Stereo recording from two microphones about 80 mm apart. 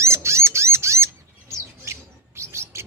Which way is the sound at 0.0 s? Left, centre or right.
Right.